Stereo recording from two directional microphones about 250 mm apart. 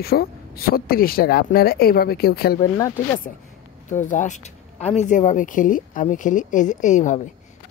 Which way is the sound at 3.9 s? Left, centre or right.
Left.